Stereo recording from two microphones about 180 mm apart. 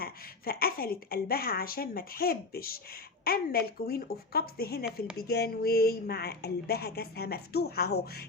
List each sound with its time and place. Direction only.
0.0 s speech: 55° left (ahead or behind)